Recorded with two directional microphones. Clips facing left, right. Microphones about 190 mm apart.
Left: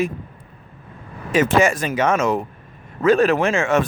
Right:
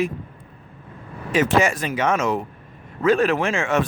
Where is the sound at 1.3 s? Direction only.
45° left (ahead or behind).